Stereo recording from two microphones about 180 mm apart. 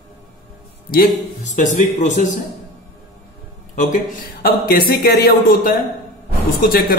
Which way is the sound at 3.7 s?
45° left (ahead or behind).